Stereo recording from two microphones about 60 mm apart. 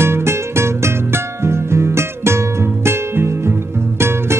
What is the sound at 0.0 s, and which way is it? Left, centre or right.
Music, right.